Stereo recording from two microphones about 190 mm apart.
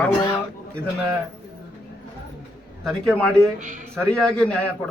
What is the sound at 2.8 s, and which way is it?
Speech, centre (ahead or behind).